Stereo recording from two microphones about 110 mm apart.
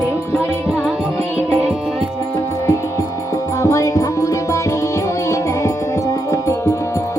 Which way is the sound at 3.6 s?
30° left (ahead or behind).